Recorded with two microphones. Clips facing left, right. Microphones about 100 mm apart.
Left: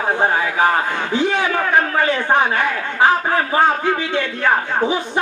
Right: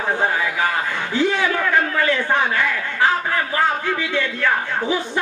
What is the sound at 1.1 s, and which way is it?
A man's voice, 20° left (ahead or behind).